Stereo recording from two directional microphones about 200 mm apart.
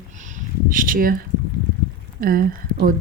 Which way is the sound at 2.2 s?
45° right (ahead or behind).